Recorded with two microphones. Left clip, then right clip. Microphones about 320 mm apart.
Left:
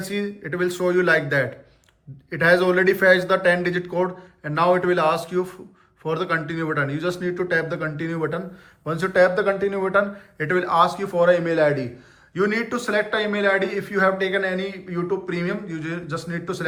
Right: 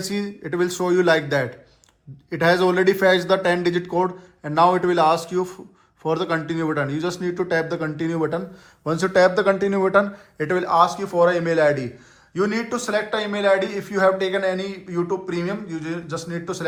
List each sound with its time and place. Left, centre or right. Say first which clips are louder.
0.0 s a man's voice: even; centre
12.3 s a man's voice: left 1 dB; centre